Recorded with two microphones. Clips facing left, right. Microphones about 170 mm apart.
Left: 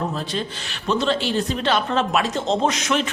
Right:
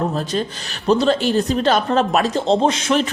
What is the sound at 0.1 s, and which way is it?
A man's voice, 45° right (ahead or behind).